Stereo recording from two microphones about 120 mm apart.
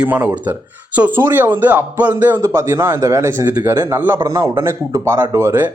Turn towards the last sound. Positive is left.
turn(degrees=-20)  # may be behind; listen again after turning